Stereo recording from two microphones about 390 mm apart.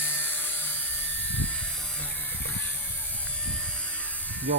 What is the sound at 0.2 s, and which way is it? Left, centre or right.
Helicopter, centre.